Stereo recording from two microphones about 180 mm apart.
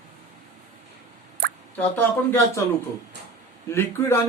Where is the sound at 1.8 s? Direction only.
10° left (ahead or behind).